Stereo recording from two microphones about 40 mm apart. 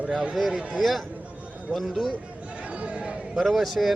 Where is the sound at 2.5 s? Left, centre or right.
Right.